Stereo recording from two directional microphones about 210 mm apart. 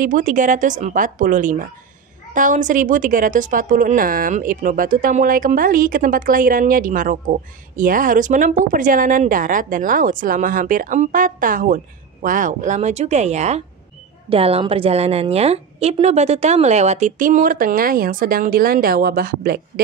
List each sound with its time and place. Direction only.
0.0 s a woman's voice: 40° right (ahead or behind)